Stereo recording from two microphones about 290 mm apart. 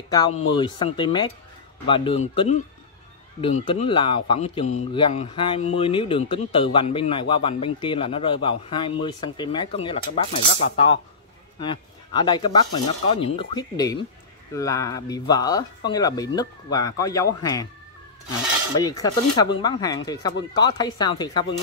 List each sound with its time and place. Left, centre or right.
0.1 s a man's voice: centre
3.6 s a man's voice: centre
18.8 s a man's voice: centre